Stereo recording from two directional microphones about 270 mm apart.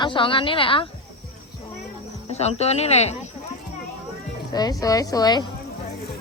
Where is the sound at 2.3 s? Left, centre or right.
Left.